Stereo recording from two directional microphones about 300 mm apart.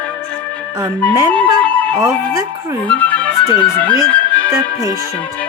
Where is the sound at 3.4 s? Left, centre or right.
Centre.